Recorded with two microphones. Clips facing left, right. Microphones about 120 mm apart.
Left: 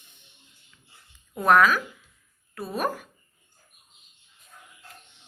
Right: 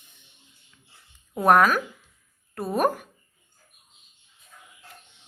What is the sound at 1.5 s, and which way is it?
A woman's voice, 45° right (ahead or behind).